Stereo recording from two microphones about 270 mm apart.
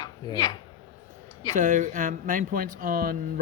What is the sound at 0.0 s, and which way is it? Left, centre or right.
Speech, centre.